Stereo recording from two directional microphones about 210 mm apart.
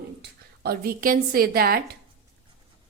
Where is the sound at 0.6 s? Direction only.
45° right (ahead or behind).